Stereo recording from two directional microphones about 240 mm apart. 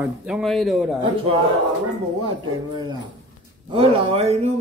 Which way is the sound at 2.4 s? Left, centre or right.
Centre.